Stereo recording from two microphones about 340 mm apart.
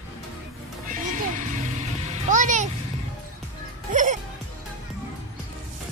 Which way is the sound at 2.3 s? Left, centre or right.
Right.